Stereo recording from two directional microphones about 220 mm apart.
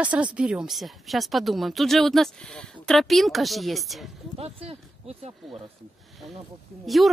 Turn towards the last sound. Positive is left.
turn(degrees=0)  # may be behind; listen again after turning